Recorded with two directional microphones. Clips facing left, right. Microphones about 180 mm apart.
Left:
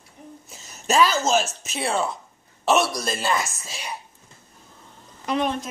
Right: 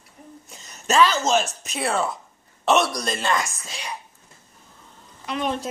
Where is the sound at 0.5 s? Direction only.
5° left (ahead or behind).